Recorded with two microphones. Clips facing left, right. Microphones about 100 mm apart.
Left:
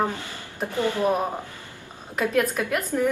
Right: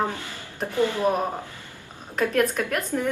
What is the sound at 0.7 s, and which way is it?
Speech, 15° left (ahead or behind).